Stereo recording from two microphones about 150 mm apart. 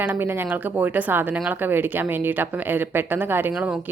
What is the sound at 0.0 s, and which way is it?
A woman's voice, 10° right (ahead or behind).